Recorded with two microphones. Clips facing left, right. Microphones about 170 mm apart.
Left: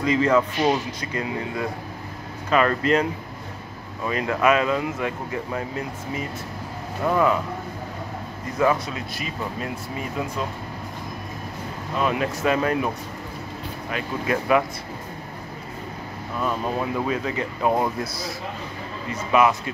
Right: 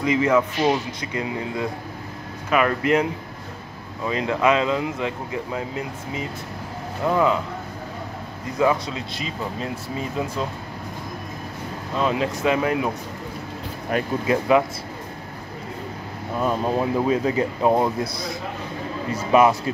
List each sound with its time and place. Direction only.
0.0 s speech: 15° right (ahead or behind)
8.5 s speech: 15° right (ahead or behind)
12.1 s speech: 20° right (ahead or behind)
13.9 s speech: 45° right (ahead or behind)
14.2 s speech: 20° right (ahead or behind)
16.3 s speech: 25° right (ahead or behind)
17.6 s speech: 20° right (ahead or behind)
19.3 s a man's voice: 35° right (ahead or behind)